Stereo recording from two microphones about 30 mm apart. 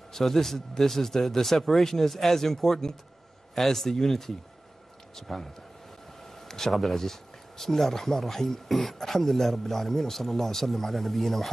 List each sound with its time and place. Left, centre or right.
0.1 s speech: centre
6.4 s a sound: centre
6.7 s speech: centre